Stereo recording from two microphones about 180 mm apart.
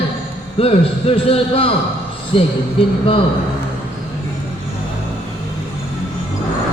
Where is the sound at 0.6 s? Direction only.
30° left (ahead or behind).